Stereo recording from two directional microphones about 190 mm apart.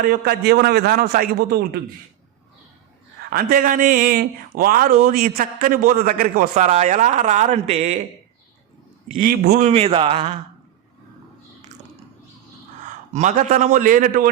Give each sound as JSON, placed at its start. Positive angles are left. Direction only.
{"t": 0.0, "sound": "a man's voice", "side_deg": -55}
{"t": 3.2, "sound": "a man's voice", "side_deg": -50}
{"t": 9.1, "sound": "a man's voice", "side_deg": -50}
{"t": 9.6, "sound": "speech", "side_deg": -35}
{"t": 12.8, "sound": "a man's voice", "side_deg": -40}